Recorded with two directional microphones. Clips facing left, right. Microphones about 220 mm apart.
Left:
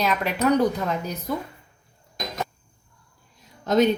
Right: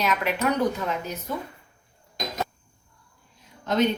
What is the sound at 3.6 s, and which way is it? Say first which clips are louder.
Speech: left 3 dB; 40° left (ahead or behind).